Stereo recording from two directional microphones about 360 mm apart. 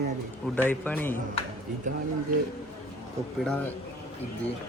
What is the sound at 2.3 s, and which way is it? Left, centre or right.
Speech, right.